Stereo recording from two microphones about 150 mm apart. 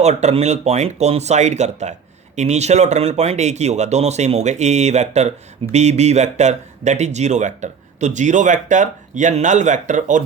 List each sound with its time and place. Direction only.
0.0 s speech: 50° right (ahead or behind)